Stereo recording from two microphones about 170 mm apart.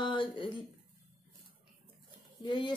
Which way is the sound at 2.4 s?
25° left (ahead or behind).